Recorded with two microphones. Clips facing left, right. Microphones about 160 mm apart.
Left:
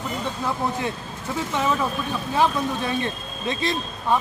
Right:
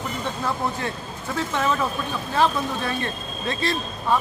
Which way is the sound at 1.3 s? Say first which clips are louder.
Even; 10° left (ahead or behind).